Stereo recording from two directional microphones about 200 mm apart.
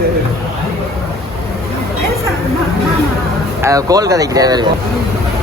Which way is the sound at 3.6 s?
15° right (ahead or behind).